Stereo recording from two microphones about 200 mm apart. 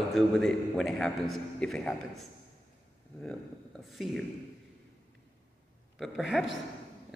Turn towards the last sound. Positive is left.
turn(degrees=0)  # may be behind; listen again after turning